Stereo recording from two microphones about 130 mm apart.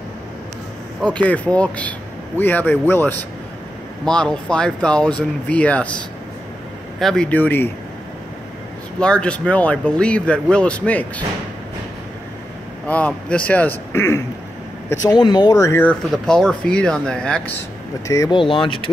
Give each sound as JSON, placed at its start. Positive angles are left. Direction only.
{"t": 1.1, "sound": "speech", "side_deg": 10}
{"t": 9.0, "sound": "speech", "side_deg": 10}
{"t": 12.8, "sound": "speech", "side_deg": 10}
{"t": 15.8, "sound": "speech", "side_deg": 5}
{"t": 18.0, "sound": "speech", "side_deg": 25}
{"t": 18.3, "sound": "speech", "side_deg": 40}